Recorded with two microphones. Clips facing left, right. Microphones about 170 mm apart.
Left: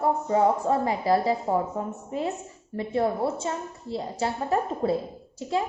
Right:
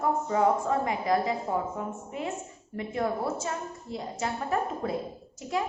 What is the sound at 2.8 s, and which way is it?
A woman's voice, 30° left (ahead or behind).